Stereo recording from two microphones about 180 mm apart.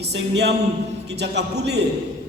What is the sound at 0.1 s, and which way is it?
A man's voice, 70° right (ahead or behind).